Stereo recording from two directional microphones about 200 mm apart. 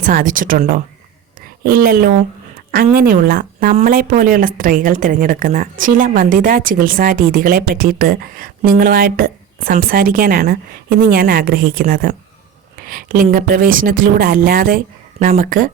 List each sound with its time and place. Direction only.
0.0 s a woman's voice: 40° right (ahead or behind)